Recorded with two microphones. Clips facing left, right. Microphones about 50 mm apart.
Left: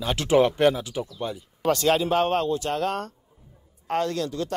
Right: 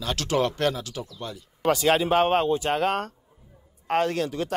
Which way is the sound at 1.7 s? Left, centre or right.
Centre.